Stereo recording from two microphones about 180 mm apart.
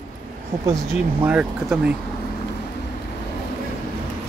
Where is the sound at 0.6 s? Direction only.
15° right (ahead or behind).